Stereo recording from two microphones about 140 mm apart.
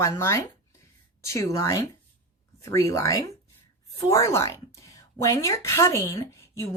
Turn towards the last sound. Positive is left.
turn(degrees=20)  # may be behind; listen again after turning